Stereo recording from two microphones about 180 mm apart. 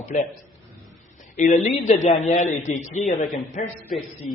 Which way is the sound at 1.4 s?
40° left (ahead or behind).